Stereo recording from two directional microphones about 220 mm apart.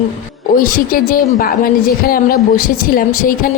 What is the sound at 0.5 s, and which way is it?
A woman's voice, 40° left (ahead or behind).